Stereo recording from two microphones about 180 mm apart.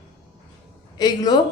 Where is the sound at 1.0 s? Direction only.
25° left (ahead or behind).